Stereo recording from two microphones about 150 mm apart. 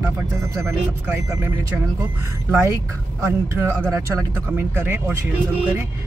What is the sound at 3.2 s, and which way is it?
A woman's voice, 20° right (ahead or behind).